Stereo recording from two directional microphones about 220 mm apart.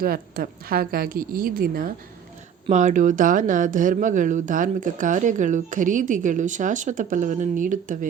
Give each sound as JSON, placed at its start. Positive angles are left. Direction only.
{"t": 0.0, "sound": "speech", "side_deg": -40}